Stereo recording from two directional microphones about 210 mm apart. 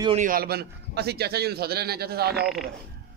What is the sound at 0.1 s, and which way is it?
A man's voice, 40° right (ahead or behind).